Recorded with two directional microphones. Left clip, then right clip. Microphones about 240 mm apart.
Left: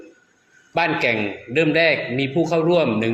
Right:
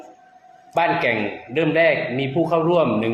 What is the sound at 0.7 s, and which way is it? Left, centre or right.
A man's voice, left.